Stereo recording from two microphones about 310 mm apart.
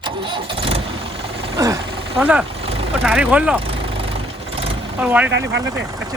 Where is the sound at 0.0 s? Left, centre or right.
Centre.